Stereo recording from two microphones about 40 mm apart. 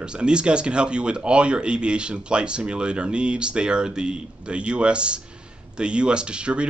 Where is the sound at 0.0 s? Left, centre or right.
Right.